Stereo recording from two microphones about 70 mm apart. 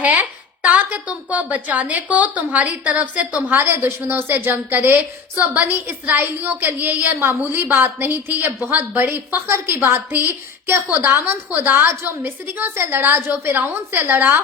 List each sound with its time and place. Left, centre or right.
0.0 s a woman's voice: right
3.6 s a woman's voice: right